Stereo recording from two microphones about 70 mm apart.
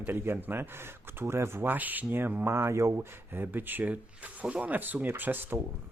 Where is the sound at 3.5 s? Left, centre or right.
Right.